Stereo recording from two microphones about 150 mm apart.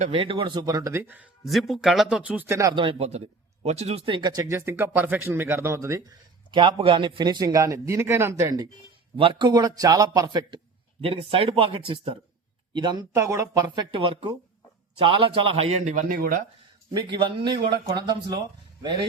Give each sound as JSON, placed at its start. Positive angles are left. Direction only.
{"t": 0.0, "sound": "speech", "side_deg": -40}
{"t": 2.8, "sound": "a man's voice", "side_deg": -45}
{"t": 6.5, "sound": "a man's voice", "side_deg": -35}
{"t": 9.1, "sound": "a man's voice", "side_deg": -35}
{"t": 11.0, "sound": "a man's voice", "side_deg": -40}
{"t": 13.9, "sound": "a man's voice", "side_deg": -35}
{"t": 16.9, "sound": "a man's voice", "side_deg": -30}